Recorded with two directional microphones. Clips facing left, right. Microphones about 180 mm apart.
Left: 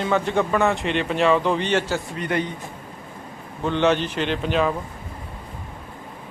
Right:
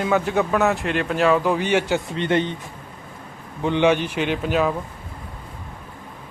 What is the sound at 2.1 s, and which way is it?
Speech, 25° right (ahead or behind).